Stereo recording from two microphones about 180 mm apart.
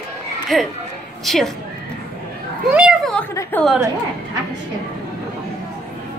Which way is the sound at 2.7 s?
5° right (ahead or behind).